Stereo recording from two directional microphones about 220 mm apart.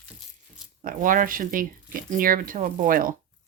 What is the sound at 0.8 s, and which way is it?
Speech, 40° right (ahead or behind).